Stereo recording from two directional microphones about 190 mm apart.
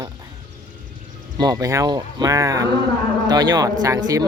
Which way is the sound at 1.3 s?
20° right (ahead or behind).